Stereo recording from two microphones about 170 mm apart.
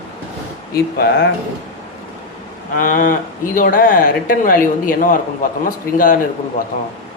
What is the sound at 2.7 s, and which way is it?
Speech, 50° left (ahead or behind).